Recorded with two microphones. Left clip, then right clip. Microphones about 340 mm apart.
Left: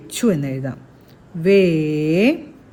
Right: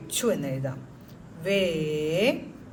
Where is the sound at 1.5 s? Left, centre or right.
Left.